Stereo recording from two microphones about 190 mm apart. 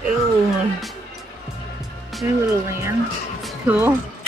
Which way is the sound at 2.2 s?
10° right (ahead or behind).